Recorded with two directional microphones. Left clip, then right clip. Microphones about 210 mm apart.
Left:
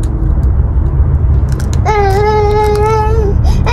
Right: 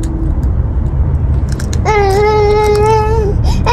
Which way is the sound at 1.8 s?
35° right (ahead or behind).